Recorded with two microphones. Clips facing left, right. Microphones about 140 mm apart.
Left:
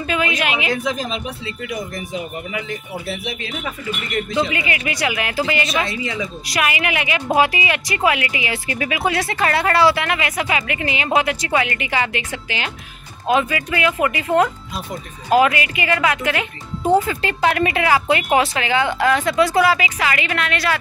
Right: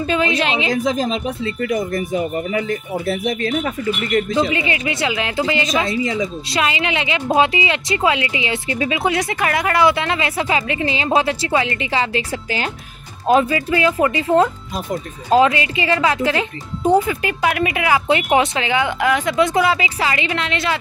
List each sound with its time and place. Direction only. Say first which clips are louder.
0.0 s speech: right 3 dB; 30° right (ahead or behind)
4.6 s speech: right 2 dB; 25° right (ahead or behind)
5.9 s speech: right 5 dB; 35° right (ahead or behind)
6.5 s speech: even; 25° right (ahead or behind)
16.8 s speech: right 1 dB; 15° right (ahead or behind)